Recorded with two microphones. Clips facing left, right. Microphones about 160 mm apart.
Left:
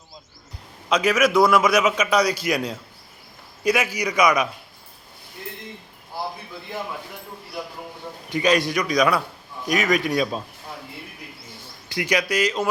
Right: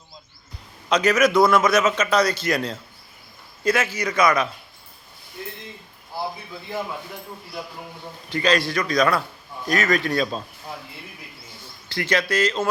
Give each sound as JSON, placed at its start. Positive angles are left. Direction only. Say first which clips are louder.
{"t": 0.9, "sound": "a man's voice", "louder": "right 1 dB", "side_deg": 5}
{"t": 8.3, "sound": "a man's voice", "louder": "left 1 dB", "side_deg": 15}
{"t": 11.9, "sound": "a man's voice", "louder": "even", "side_deg": 15}